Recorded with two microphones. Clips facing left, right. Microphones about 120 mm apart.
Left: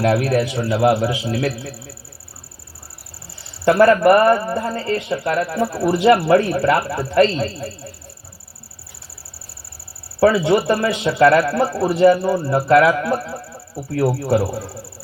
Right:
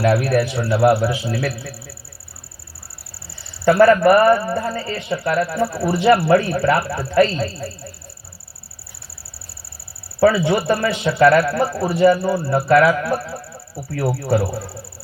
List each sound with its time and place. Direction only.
0.1 s a man's voice: 20° left (ahead or behind)
3.6 s a man's voice: 15° left (ahead or behind)
10.2 s a man's voice: 20° left (ahead or behind)
12.2 s speech: 10° right (ahead or behind)
12.7 s a man's voice: 15° left (ahead or behind)